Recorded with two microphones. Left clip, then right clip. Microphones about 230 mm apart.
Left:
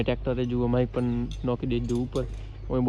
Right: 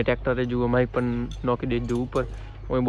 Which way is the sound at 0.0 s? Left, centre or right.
Centre.